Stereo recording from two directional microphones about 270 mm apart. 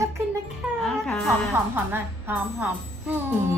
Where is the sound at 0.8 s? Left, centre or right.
Centre.